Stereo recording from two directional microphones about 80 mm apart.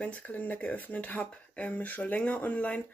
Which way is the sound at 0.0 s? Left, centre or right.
Centre.